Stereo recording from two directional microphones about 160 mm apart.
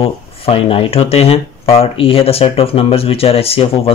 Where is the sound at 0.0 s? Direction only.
35° left (ahead or behind).